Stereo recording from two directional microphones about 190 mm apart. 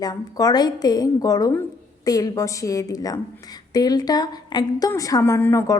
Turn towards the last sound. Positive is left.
turn(degrees=15)  # may be behind; listen again after turning